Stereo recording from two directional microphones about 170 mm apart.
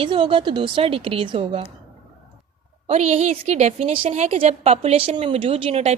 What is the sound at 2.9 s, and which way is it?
A woman's voice, 40° right (ahead or behind).